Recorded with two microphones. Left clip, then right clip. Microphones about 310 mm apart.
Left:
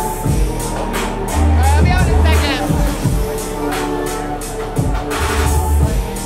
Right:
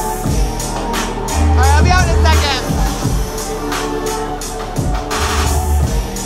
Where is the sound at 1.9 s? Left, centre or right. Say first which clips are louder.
Right 3 dB; centre.